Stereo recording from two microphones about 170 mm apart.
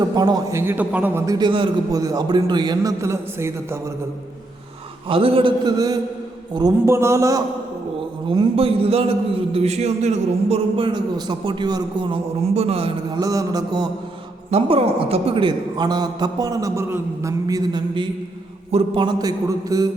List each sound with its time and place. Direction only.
0.1 s a man's voice: 25° right (ahead or behind)
1.4 s a man's voice: 30° right (ahead or behind)
5.0 s a man's voice: 30° right (ahead or behind)
8.3 s a man's voice: 30° right (ahead or behind)
13.1 s a man's voice: 20° right (ahead or behind)
14.5 s a man's voice: 35° right (ahead or behind)